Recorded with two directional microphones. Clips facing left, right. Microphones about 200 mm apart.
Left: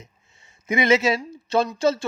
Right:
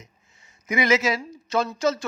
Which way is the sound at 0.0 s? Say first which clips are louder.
Left 2 dB; 25° left (ahead or behind).